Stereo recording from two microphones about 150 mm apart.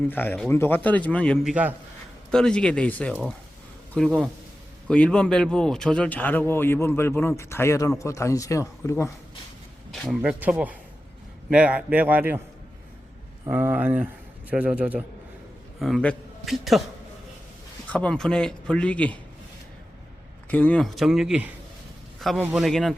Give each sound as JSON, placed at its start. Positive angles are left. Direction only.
{"t": 0.1, "sound": "a man's voice", "side_deg": 15}
{"t": 9.9, "sound": "a man's voice", "side_deg": 0}
{"t": 10.2, "sound": "a man's voice", "side_deg": -10}
{"t": 13.4, "sound": "a man's voice", "side_deg": -15}
{"t": 15.8, "sound": "a man's voice", "side_deg": 5}
{"t": 17.8, "sound": "a man's voice", "side_deg": 10}
{"t": 20.5, "sound": "speech", "side_deg": 10}